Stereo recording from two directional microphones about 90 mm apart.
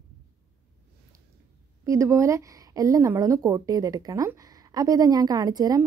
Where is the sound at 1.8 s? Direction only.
30° right (ahead or behind).